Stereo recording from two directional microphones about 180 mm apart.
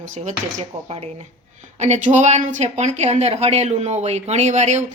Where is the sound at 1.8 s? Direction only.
40° right (ahead or behind).